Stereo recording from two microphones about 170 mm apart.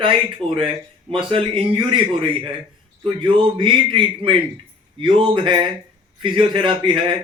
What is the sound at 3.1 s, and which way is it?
Speech, 30° right (ahead or behind).